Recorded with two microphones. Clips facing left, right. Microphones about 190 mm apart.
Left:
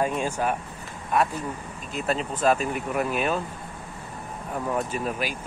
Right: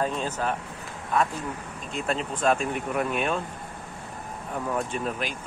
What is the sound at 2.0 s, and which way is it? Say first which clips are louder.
Speech: left 2 dB; 5° left (ahead or behind).